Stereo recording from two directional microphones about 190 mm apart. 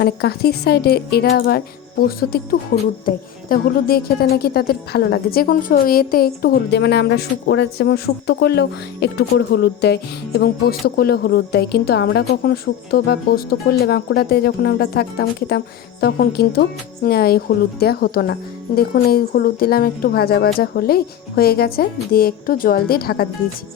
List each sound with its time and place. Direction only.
0.0 s a woman's voice: 55° left (ahead or behind)